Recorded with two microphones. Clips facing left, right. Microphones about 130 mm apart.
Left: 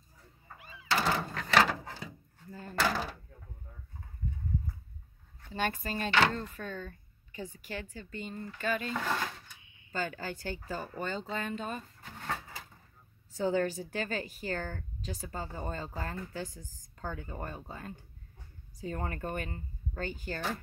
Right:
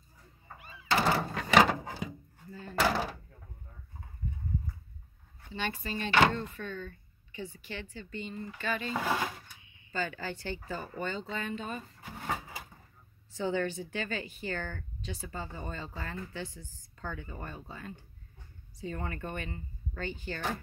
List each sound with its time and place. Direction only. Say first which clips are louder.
0.9 s a sound: right 3 dB; 5° right (ahead or behind)
2.7 s door: right 2 dB; 10° right (ahead or behind)
5.5 s a woman's voice: left 2 dB; 45° left (ahead or behind)
8.8 s speech: right 2 dB; 10° right (ahead or behind)
9.9 s a woman's voice: even; 45° left (ahead or behind)
11.8 s drawer open or close: right 3 dB; 10° right (ahead or behind)
13.3 s a woman's voice: left 2 dB; 40° left (ahead or behind)